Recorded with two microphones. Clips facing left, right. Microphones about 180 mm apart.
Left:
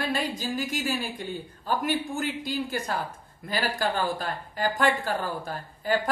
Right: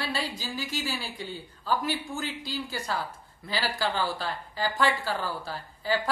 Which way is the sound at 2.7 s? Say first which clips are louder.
Left 2 dB; 50° left (ahead or behind).